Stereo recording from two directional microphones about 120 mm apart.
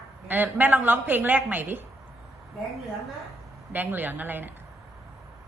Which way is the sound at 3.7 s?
15° right (ahead or behind).